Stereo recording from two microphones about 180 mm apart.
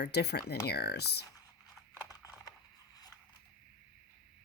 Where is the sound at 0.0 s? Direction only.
65° left (ahead or behind).